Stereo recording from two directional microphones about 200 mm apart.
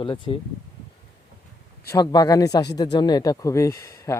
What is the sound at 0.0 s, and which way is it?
Speech, 25° left (ahead or behind).